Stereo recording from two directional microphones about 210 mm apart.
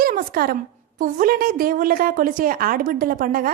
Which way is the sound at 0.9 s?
40° right (ahead or behind).